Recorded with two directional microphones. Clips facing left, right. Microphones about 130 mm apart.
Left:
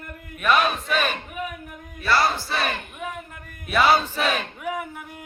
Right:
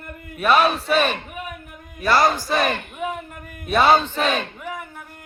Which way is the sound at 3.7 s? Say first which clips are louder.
Right 3 dB; 30° right (ahead or behind).